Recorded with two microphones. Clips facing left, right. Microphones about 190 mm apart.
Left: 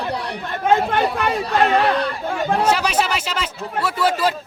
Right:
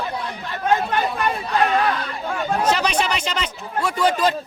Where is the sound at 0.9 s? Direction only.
80° left.